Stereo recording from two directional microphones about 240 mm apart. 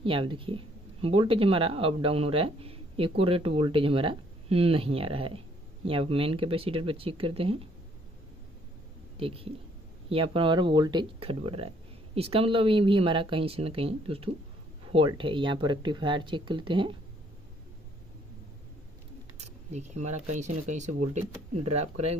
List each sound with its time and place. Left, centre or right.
0.0 s speech: right
9.1 s speech: right
19.3 s speech: right